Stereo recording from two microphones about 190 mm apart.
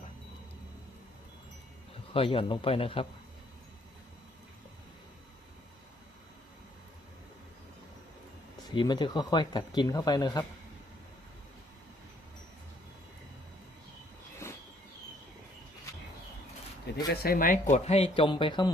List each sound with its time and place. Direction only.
2.1 s speech: 30° left (ahead or behind)
8.7 s speech: 25° left (ahead or behind)
17.1 s speech: 50° left (ahead or behind); by 18.7 s 25° left (ahead or behind)